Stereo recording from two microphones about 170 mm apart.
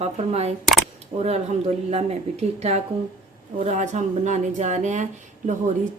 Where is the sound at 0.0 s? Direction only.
40° right (ahead or behind).